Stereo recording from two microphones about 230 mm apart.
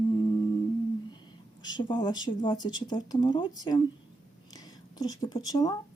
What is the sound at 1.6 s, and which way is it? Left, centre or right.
Speech, centre.